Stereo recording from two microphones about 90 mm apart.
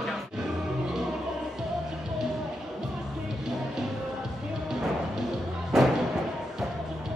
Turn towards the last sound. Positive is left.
turn(degrees=-5)  # may be behind; listen again after turning